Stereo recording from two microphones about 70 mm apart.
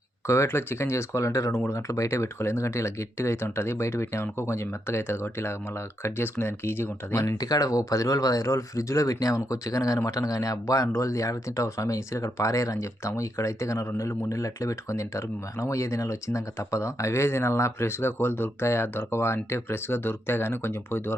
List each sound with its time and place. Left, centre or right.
0.3 s speech: left
7.2 s speech: left